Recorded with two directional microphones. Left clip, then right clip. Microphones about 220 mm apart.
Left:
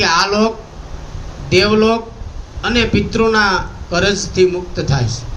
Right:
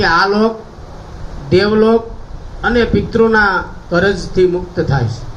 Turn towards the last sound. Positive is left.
turn(degrees=-30)  # may be behind; listen again after turning